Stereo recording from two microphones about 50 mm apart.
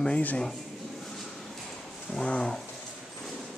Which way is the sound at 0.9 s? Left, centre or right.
Centre.